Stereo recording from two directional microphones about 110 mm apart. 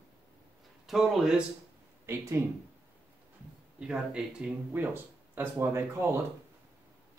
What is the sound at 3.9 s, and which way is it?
Speech, 10° right (ahead or behind).